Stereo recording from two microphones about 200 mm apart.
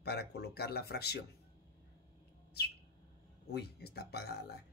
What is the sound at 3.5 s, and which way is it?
Speech, 55° left (ahead or behind).